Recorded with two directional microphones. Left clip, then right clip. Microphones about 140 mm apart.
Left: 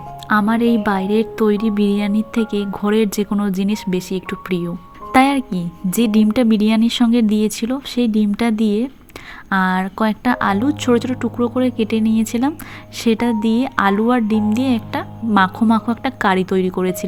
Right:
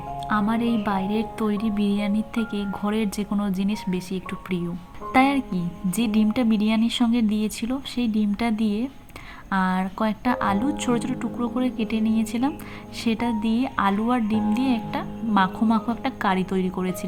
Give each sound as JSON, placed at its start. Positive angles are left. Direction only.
{"t": 0.3, "sound": "speech", "side_deg": 35}